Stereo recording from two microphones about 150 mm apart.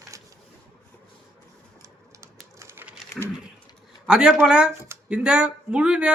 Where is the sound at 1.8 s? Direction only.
20° right (ahead or behind).